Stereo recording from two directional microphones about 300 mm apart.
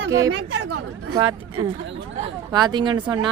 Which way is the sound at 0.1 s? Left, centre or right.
Centre.